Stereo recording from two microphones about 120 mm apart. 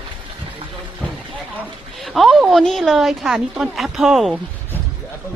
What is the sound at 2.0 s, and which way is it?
A woman's voice, centre (ahead or behind).